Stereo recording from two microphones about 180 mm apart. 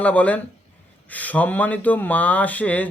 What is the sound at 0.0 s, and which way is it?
A man's voice, 10° left (ahead or behind).